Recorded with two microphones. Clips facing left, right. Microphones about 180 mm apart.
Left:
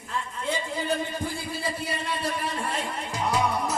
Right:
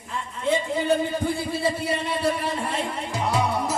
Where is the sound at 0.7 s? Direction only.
25° right (ahead or behind).